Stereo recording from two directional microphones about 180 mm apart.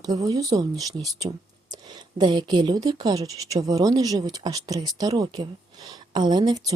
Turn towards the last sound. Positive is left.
turn(degrees=-20)  # may be behind; listen again after turning